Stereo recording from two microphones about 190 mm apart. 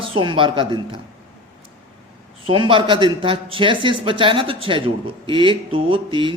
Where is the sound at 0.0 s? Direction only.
25° right (ahead or behind).